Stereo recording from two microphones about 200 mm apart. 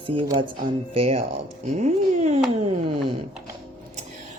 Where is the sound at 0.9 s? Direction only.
30° right (ahead or behind).